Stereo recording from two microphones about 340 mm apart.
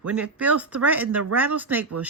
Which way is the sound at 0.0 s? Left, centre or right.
Centre.